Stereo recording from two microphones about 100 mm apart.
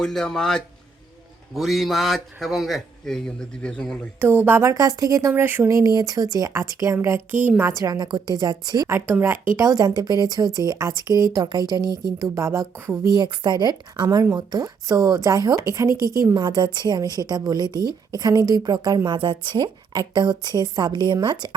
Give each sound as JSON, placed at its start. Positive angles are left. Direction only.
{"t": 0.0, "sound": "a man's voice", "side_deg": 5}
{"t": 4.2, "sound": "a woman's voice", "side_deg": -20}
{"t": 4.6, "sound": "a woman's voice", "side_deg": -35}
{"t": 5.3, "sound": "a woman's voice", "side_deg": -20}
{"t": 7.3, "sound": "a woman's voice", "side_deg": -15}
{"t": 7.8, "sound": "a woman's voice", "side_deg": -40}
{"t": 8.9, "sound": "a woman's voice", "side_deg": -25}
{"t": 12.3, "sound": "a woman's voice", "side_deg": -30}
{"t": 13.1, "sound": "a woman's voice", "side_deg": -50}
{"t": 19.1, "sound": "a woman's voice", "side_deg": -55}